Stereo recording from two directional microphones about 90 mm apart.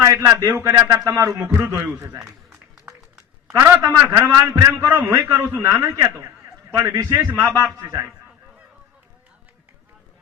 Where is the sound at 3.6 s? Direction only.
25° right (ahead or behind).